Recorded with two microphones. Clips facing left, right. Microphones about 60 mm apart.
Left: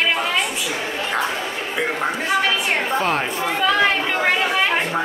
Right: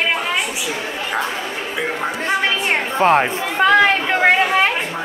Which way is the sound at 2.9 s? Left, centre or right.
Right.